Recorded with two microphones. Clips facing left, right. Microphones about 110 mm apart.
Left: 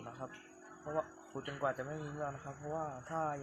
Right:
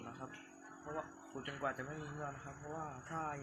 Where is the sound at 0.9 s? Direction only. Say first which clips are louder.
Left 6 dB; 20° left (ahead or behind).